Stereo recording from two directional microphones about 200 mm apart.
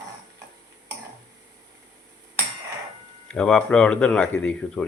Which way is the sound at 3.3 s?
5° left (ahead or behind).